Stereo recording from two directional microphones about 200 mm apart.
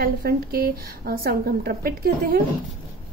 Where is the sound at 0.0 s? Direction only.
50° right (ahead or behind).